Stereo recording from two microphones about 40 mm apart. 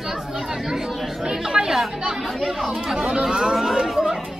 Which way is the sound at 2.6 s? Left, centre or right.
Centre.